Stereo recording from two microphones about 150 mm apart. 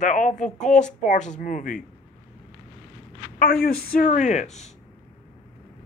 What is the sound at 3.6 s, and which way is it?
Speech, 65° left (ahead or behind).